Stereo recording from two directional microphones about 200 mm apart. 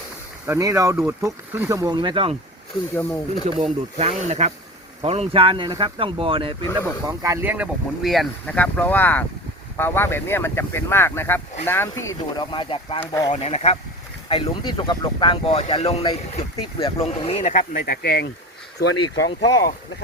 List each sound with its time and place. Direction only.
0.4 s speech: 15° right (ahead or behind)
2.9 s speech: 10° left (ahead or behind)
3.6 s speech: 30° right (ahead or behind)
7.1 s speech: 15° right (ahead or behind); by 12.0 s 10° left (ahead or behind)
12.4 s speech: 25° left (ahead or behind)
13.3 s speech: 30° left (ahead or behind); by 18.9 s 55° left (ahead or behind)
19.1 s speech: 15° left (ahead or behind)